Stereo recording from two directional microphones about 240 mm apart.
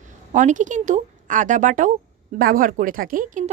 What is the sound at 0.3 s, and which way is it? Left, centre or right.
A woman's voice, right.